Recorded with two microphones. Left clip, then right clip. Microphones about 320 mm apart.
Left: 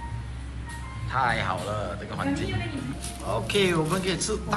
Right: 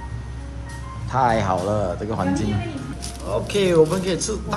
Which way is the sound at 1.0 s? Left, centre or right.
Centre.